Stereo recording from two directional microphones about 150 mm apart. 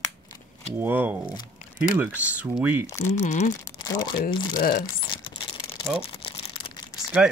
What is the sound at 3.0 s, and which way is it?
Speech, 50° left (ahead or behind).